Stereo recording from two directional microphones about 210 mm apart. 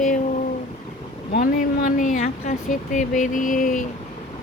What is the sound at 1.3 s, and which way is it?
A woman's voice, 40° left (ahead or behind).